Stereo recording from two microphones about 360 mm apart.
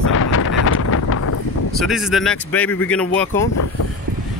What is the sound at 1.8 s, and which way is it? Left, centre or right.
Speech, centre.